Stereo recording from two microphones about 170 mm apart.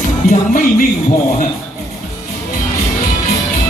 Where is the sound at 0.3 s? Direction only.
50° left (ahead or behind).